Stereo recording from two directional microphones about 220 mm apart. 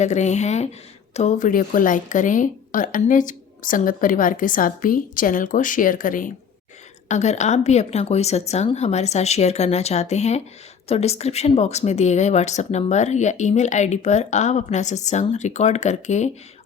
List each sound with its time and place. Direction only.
0.0 s a woman's voice: 30° left (ahead or behind)